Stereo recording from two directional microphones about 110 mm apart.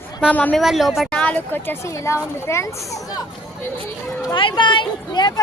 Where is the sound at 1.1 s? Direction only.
10° left (ahead or behind); by 3.2 s 35° left (ahead or behind).